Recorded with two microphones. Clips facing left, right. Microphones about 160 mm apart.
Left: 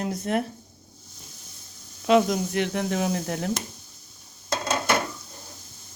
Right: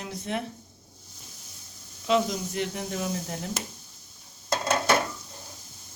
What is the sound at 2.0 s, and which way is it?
Speech, 60° left (ahead or behind).